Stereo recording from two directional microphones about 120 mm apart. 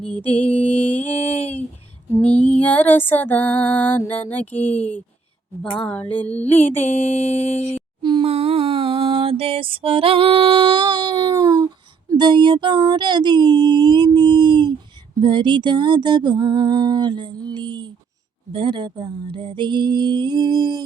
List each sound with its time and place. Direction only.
0.9 s female singing: 15° left (ahead or behind)
8.0 s a sound: 40° right (ahead or behind)
8.3 s music: 55° right (ahead or behind); by 11.7 s 35° right (ahead or behind)
12.1 s humming: 40° right (ahead or behind)